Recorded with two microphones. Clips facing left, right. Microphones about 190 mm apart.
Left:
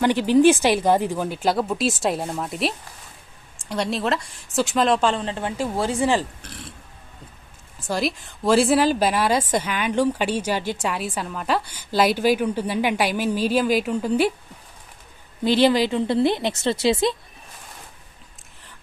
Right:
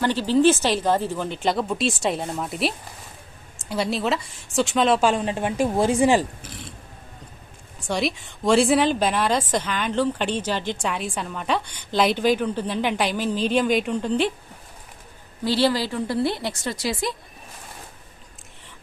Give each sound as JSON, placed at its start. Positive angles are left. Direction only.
{"t": 0.0, "sound": "speech", "side_deg": 15}
{"t": 6.4, "sound": "burping", "side_deg": 0}
{"t": 7.8, "sound": "a woman's voice", "side_deg": 0}
{"t": 15.4, "sound": "a woman's voice", "side_deg": 20}